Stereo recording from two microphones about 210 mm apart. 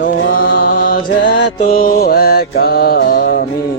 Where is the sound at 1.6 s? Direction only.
40° left (ahead or behind).